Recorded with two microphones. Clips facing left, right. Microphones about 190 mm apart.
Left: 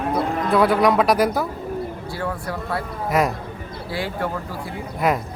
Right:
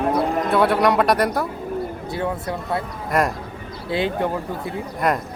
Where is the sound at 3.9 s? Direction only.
20° right (ahead or behind).